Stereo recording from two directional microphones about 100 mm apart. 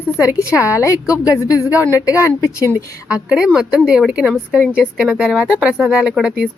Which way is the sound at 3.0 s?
10° right (ahead or behind).